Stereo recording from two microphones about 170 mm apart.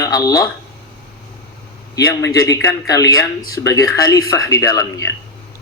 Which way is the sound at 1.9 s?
20° left (ahead or behind).